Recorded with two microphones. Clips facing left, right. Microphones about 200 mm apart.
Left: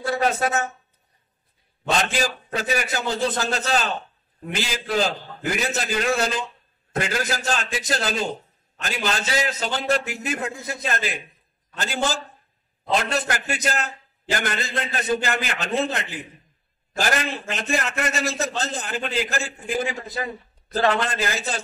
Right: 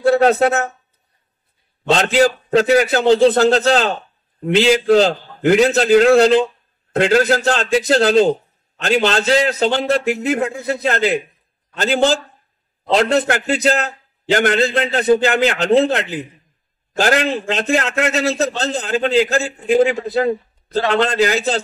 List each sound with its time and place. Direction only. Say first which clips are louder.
0.0 s a man's voice: right 10 dB; 70° right (ahead or behind)
1.9 s a man's voice: right 9 dB; 70° right (ahead or behind)